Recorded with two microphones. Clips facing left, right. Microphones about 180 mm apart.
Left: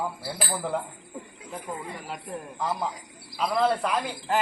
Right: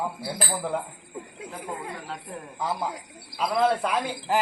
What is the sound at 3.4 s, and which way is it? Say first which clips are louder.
Speech: right 1 dB; 5° right (ahead or behind).